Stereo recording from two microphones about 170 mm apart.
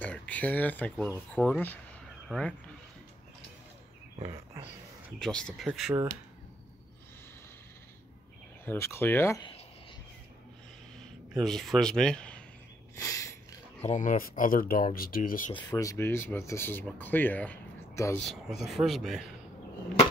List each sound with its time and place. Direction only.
0.0 s speech: 10° left (ahead or behind)
4.2 s speech: 35° right (ahead or behind)
5.2 s speech: 5° left (ahead or behind)
8.6 s speech: 15° left (ahead or behind)
11.3 s speech: centre (ahead or behind)
12.9 s a sound: 15° left (ahead or behind)
13.7 s speech: 40° left (ahead or behind)
15.5 s speech: 20° left (ahead or behind)
18.2 s speech: centre (ahead or behind)